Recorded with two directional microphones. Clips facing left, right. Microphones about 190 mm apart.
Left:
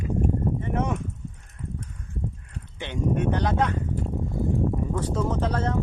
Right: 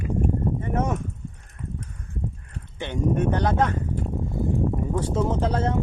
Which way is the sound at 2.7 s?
45° right (ahead or behind).